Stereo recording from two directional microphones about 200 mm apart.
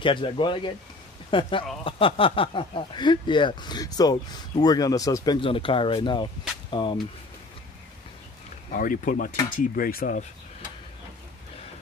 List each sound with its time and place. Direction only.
0.0 s speech: 25° left (ahead or behind)
8.7 s speech: 40° left (ahead or behind)